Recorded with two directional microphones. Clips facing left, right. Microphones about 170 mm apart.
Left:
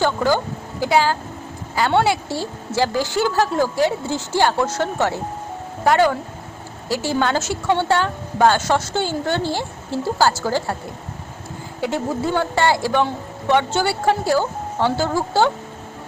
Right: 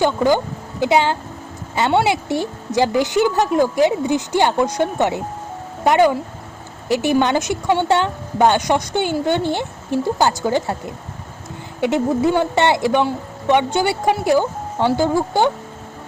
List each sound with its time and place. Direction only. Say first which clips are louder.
0.0 s a woman's voice: right 3 dB; 20° right (ahead or behind)